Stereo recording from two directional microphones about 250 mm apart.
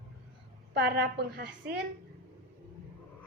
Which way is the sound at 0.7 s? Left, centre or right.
Right.